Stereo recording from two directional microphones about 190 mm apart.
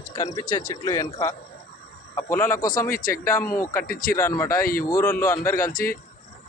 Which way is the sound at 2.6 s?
45° left (ahead or behind).